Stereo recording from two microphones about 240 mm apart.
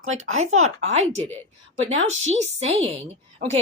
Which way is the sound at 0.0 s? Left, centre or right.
Right.